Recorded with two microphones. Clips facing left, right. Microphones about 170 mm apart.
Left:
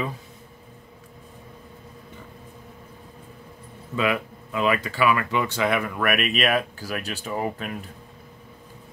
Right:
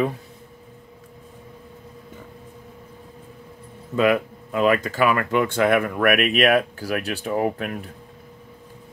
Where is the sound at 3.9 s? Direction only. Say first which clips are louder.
Right 6 dB; 45° right (ahead or behind).